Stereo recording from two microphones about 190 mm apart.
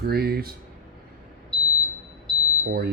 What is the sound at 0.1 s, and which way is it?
Speech, 55° right (ahead or behind).